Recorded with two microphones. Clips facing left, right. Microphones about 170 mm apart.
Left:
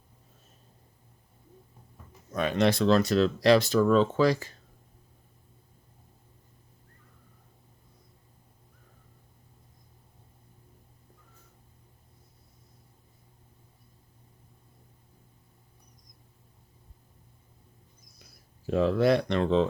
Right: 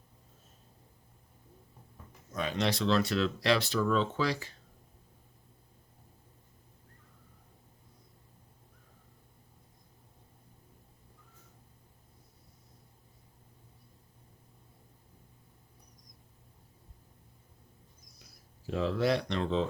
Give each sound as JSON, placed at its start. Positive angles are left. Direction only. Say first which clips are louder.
{"t": 2.3, "sound": "speech", "louder": "left 7 dB", "side_deg": 60}
{"t": 18.7, "sound": "speech", "louder": "left 6 dB", "side_deg": 55}